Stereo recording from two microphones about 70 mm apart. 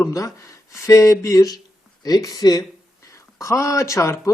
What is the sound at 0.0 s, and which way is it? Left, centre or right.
Speech, left.